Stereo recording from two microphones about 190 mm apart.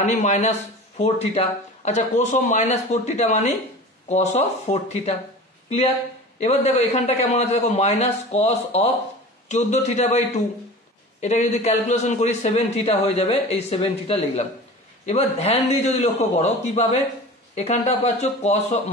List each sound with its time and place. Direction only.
0.0 s a man's voice: 40° left (ahead or behind)
6.4 s a man's voice: 35° left (ahead or behind)